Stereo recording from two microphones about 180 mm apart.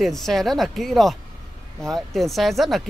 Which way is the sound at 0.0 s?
Centre (ahead or behind).